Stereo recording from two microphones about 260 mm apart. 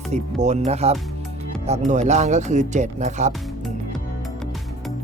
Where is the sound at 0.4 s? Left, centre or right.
Right.